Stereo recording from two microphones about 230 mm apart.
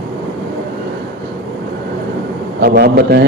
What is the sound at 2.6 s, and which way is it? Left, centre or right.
Speech, right.